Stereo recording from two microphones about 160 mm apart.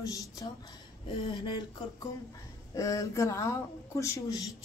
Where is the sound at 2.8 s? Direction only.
20° left (ahead or behind).